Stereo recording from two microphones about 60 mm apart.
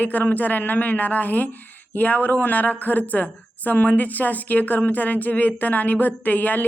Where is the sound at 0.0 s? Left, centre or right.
Left.